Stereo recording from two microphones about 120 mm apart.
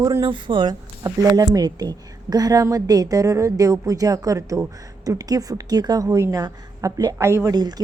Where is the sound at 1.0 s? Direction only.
30° right (ahead or behind).